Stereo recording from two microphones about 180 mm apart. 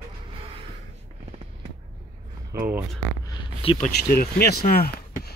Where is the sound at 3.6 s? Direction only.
30° left (ahead or behind).